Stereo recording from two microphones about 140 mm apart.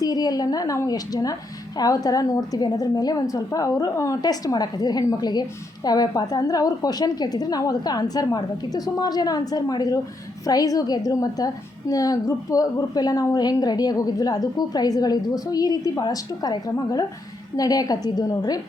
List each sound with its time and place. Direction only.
0.0 s a woman's voice: 30° left (ahead or behind)